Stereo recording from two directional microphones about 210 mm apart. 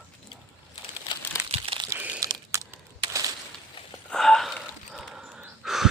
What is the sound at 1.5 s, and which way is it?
Crumpling, 25° right (ahead or behind).